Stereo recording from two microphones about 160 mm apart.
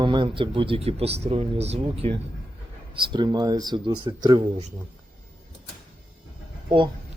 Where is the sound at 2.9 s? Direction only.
30° right (ahead or behind).